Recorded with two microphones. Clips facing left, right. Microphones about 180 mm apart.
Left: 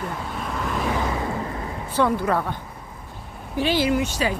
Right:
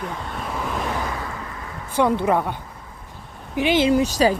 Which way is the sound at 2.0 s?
20° right (ahead or behind).